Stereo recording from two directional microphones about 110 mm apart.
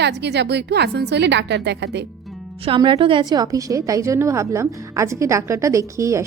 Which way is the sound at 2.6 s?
50° right (ahead or behind).